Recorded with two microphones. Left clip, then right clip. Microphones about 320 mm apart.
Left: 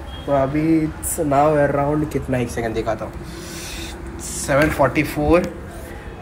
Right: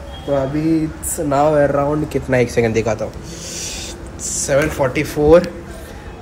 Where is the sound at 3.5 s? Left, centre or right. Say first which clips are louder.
Right 5 dB; centre.